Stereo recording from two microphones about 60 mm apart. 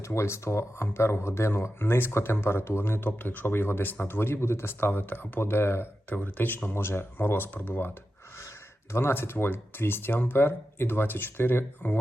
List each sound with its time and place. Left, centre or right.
0.0 s speech: left
6.1 s speech: left
8.9 s speech: left